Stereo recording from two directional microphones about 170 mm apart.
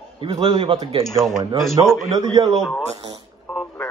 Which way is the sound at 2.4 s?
25° right (ahead or behind).